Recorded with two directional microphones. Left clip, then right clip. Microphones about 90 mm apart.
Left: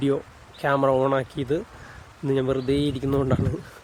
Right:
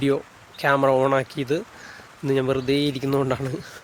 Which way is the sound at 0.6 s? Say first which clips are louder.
Right 2 dB; 15° left (ahead or behind).